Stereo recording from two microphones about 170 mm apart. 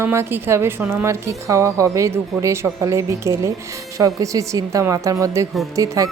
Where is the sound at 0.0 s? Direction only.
15° right (ahead or behind).